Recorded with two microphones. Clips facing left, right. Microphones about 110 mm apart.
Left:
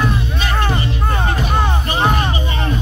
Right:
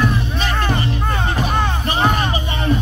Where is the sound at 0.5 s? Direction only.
10° left (ahead or behind).